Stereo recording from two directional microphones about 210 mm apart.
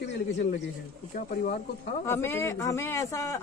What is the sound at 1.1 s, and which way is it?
Speech, 40° left (ahead or behind).